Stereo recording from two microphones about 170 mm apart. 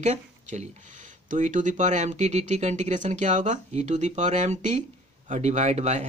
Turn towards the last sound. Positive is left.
turn(degrees=-40)  # may be behind; listen again after turning